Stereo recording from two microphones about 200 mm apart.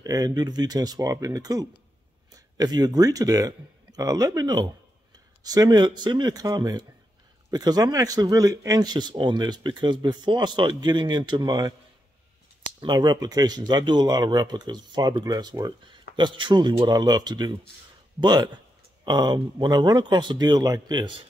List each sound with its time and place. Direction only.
0.0 s speech: 20° right (ahead or behind)
12.8 s speech: 20° right (ahead or behind)